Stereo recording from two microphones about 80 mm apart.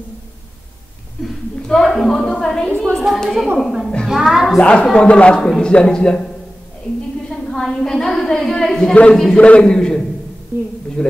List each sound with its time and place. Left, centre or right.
1.7 s a man's voice: centre
5.0 s a man's voice: centre
7.2 s a woman's voice: centre
9.4 s a man's voice: centre